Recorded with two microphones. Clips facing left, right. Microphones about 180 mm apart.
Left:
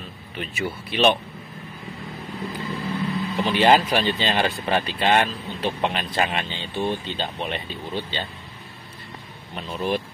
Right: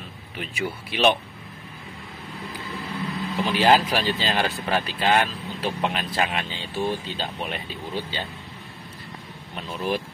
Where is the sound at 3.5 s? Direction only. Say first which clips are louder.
Left 2 dB; centre (ahead or behind).